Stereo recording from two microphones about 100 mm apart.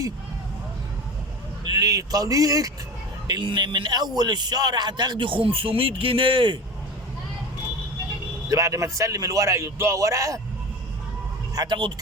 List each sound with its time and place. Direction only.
1.6 s speech: 40° right (ahead or behind)
3.2 s a man's voice: 50° right (ahead or behind)
8.4 s a man's voice: 35° right (ahead or behind)
11.5 s a man's voice: 45° right (ahead or behind)